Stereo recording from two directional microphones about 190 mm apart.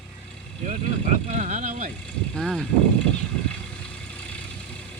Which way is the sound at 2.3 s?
5° left (ahead or behind).